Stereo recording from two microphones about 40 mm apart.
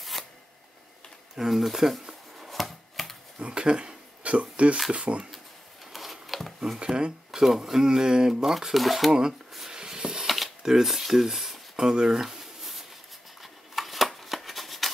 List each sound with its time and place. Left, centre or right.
1.3 s speech: centre
2.5 s chopping: centre
3.3 s a sound: right
4.9 s speech: right
5.9 s a sound: centre
6.8 s speech: right
7.2 s speech: centre
9.7 s rub: centre
10.2 s a sound: centre
10.6 s speech: centre
12.2 s a sound: centre
13.4 s scissors: centre